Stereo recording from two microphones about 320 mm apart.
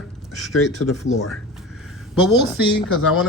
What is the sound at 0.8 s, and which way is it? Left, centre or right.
Speech, left.